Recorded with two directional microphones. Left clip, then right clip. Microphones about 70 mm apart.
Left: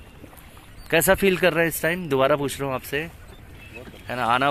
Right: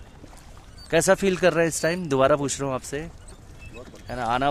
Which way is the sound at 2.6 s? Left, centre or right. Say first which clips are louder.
Left 1 dB; right.